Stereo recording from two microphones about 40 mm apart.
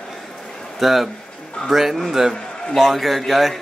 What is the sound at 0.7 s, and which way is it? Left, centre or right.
A man's voice, centre.